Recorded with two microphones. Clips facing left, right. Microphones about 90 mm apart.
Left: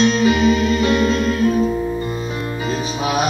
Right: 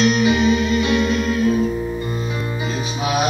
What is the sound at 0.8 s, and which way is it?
Music, 35° left (ahead or behind).